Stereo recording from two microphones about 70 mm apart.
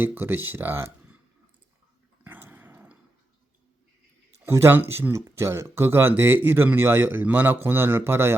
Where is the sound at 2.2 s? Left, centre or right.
Right.